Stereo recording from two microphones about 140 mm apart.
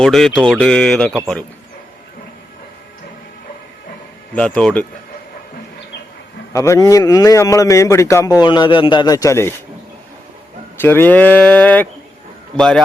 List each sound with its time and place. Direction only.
0.0 s speech: centre (ahead or behind)
4.4 s speech: 5° left (ahead or behind)
6.5 s a man's voice: 20° left (ahead or behind)
10.8 s speech: 15° left (ahead or behind)